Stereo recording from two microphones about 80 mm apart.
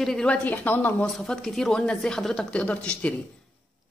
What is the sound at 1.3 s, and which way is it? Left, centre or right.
A woman's voice, centre.